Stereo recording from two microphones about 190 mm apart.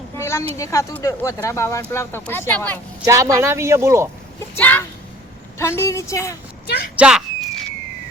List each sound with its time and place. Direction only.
0.2 s a sound: 15° left (ahead or behind)
0.5 s speech: 15° left (ahead or behind)
3.0 s speech: 15° right (ahead or behind)
4.5 s speech: 10° left (ahead or behind)
6.9 s speech: 5° right (ahead or behind)